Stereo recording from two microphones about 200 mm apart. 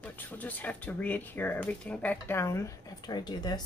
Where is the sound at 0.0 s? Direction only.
10° left (ahead or behind).